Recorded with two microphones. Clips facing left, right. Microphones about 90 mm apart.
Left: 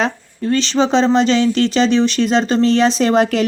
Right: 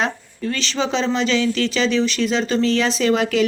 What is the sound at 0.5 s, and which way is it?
Speech, 30° left (ahead or behind).